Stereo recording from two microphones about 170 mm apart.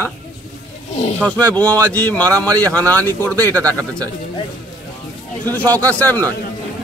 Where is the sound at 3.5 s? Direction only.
15° right (ahead or behind).